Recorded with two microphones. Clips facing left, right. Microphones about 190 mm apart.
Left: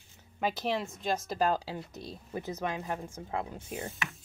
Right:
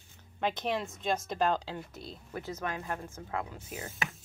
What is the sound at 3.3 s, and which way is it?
Speech, 25° left (ahead or behind).